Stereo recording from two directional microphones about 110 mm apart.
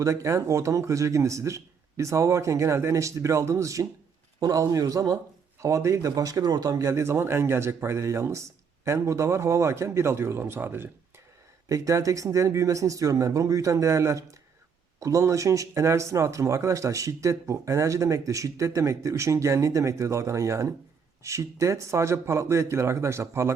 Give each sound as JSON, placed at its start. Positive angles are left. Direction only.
{"t": 0.0, "sound": "a man's voice", "side_deg": -30}
{"t": 11.7, "sound": "speech", "side_deg": -30}